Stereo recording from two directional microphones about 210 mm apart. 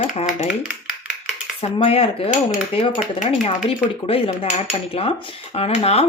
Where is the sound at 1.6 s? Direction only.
30° left (ahead or behind).